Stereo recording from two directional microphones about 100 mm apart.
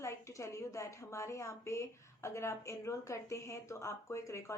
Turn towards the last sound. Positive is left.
turn(degrees=30)  # may be behind; listen again after turning